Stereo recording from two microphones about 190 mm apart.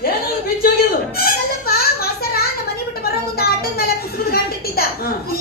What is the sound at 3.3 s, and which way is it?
Speech, 55° left (ahead or behind).